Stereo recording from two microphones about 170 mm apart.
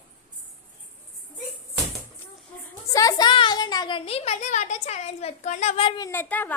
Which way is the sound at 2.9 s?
20° left (ahead or behind).